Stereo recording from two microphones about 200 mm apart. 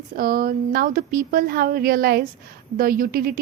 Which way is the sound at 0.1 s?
50° right (ahead or behind).